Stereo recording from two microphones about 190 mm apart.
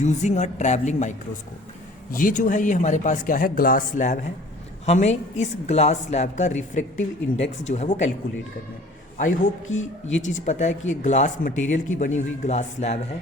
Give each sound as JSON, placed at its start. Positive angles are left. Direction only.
{"t": 0.0, "sound": "a woman's voice", "side_deg": 40}
{"t": 9.1, "sound": "a man's voice", "side_deg": 45}